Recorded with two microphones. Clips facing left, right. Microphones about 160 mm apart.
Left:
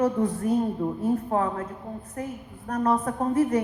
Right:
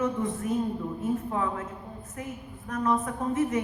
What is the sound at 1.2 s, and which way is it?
Speech, 50° left (ahead or behind).